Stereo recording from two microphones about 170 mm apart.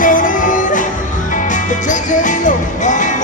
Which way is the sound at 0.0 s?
50° left (ahead or behind).